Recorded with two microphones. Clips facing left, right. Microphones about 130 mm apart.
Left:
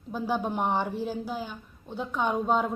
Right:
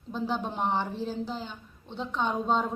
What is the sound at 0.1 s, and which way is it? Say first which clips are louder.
A woman's voice: left 2 dB; 10° left (ahead or behind).